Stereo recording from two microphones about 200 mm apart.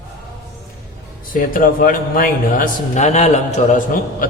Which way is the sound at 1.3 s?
45° left (ahead or behind).